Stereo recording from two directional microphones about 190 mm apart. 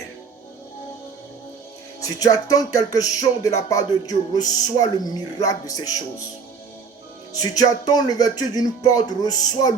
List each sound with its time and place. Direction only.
2.0 s speech: 20° left (ahead or behind)
7.5 s speech: 20° left (ahead or behind)